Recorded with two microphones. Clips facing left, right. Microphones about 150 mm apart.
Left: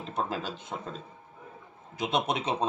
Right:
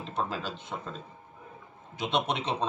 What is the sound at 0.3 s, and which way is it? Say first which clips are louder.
Speech: left 1 dB; 45° left (ahead or behind).